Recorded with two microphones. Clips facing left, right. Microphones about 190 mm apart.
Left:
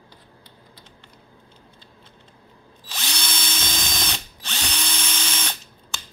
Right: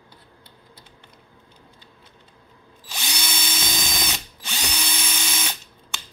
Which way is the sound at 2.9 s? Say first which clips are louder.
Even; 10° right (ahead or behind).